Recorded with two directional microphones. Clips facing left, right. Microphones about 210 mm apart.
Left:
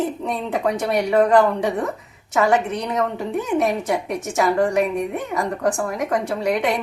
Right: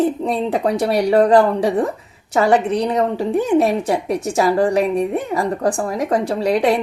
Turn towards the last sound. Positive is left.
turn(degrees=-30)  # may be behind; listen again after turning